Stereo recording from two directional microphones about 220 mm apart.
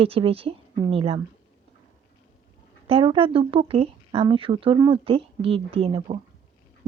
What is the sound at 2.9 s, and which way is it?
Speech, 25° right (ahead or behind).